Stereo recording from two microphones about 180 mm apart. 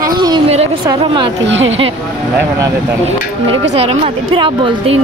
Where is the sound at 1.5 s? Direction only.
90° right.